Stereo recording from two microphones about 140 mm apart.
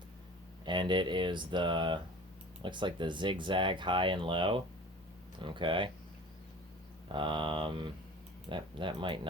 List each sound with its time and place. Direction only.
0.6 s speech: 35° right (ahead or behind)
7.1 s speech: 35° right (ahead or behind)